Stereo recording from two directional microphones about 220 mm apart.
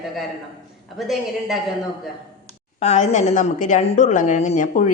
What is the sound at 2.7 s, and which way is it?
A woman's voice, 30° left (ahead or behind).